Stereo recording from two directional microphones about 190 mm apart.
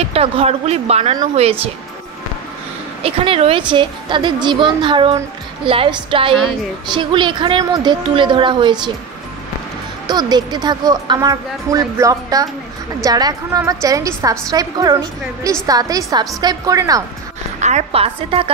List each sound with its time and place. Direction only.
0.1 s speech: 30° right (ahead or behind)
3.0 s speech: 30° right (ahead or behind)
10.0 s a woman's voice: 20° right (ahead or behind)
17.6 s speech: 35° right (ahead or behind)